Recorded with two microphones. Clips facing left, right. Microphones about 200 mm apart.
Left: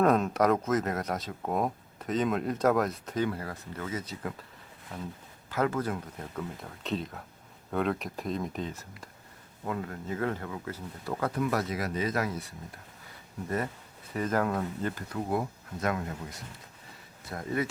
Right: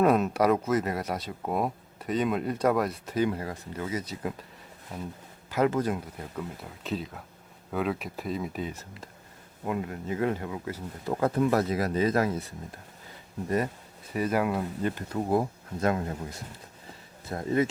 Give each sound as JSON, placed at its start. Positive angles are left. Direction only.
{"t": 0.0, "sound": "speech", "side_deg": -5}
{"t": 3.2, "sound": "speech", "side_deg": -15}
{"t": 5.5, "sound": "speech", "side_deg": -15}
{"t": 6.3, "sound": "speech", "side_deg": -5}
{"t": 11.1, "sound": "speech", "side_deg": -25}
{"t": 14.1, "sound": "speech", "side_deg": -10}
{"t": 15.3, "sound": "speech", "side_deg": -30}